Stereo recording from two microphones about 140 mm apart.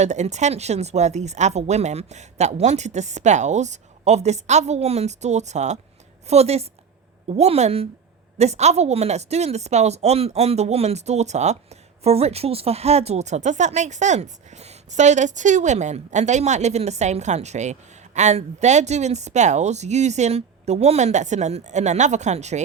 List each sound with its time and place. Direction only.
0.0 s speech: 55° right (ahead or behind)